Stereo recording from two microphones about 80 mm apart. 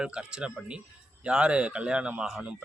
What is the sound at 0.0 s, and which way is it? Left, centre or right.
A man's voice, centre.